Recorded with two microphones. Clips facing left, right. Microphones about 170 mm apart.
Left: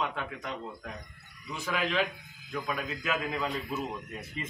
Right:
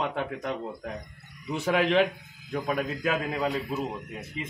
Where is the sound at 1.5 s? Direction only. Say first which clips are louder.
Right 7 dB; 65° right (ahead or behind).